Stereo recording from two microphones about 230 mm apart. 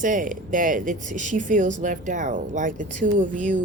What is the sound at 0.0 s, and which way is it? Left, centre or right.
Speech, right.